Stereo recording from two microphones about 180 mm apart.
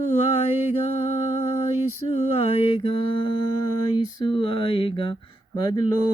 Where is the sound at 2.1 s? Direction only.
35° left (ahead or behind).